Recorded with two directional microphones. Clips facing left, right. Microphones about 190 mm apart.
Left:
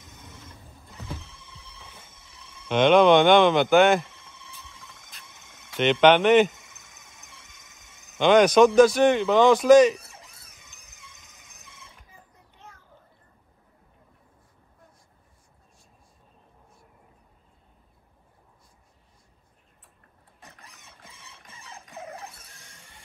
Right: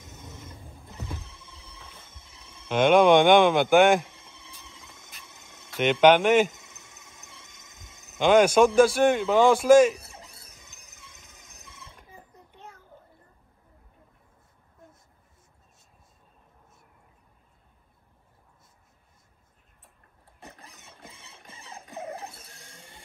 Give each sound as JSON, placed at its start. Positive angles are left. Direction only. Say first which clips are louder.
{"t": 2.7, "sound": "speech", "louder": "left 1 dB", "side_deg": -10}
{"t": 5.8, "sound": "speech", "louder": "even", "side_deg": -10}
{"t": 6.8, "sound": "a sound", "louder": "right 2 dB", "side_deg": -30}
{"t": 8.2, "sound": "speech", "louder": "left 2 dB", "side_deg": -5}
{"t": 10.0, "sound": "a sound", "louder": "right 2 dB", "side_deg": -30}
{"t": 11.8, "sound": "a sound", "louder": "right 6 dB", "side_deg": -35}
{"t": 20.3, "sound": "printer", "louder": "right 4 dB", "side_deg": -30}
{"t": 21.8, "sound": "squeal", "louder": "right 4 dB", "side_deg": -30}
{"t": 22.3, "sound": "music", "louder": "right 3 dB", "side_deg": -30}